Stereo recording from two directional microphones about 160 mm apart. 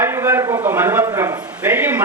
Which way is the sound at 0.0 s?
15° right (ahead or behind).